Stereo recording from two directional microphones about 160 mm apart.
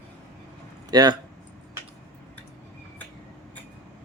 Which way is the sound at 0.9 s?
25° right (ahead or behind).